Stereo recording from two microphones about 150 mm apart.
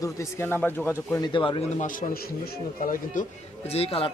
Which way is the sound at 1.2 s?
35° left (ahead or behind).